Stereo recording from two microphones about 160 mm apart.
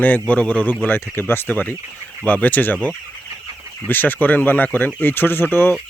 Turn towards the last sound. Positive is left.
turn(degrees=15)  # may be behind; listen again after turning